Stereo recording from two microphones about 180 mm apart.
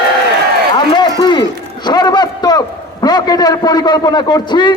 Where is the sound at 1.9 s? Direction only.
25° left (ahead or behind).